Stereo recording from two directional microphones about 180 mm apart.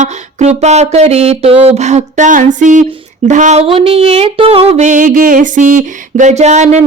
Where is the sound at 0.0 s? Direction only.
40° right (ahead or behind).